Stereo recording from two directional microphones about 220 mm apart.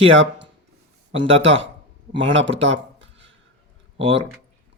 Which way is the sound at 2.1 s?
60° right (ahead or behind).